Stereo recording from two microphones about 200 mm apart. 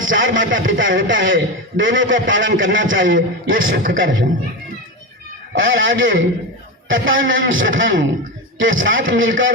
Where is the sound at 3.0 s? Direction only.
75° right (ahead or behind).